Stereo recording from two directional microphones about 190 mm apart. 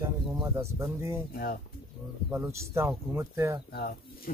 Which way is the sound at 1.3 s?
50° left (ahead or behind).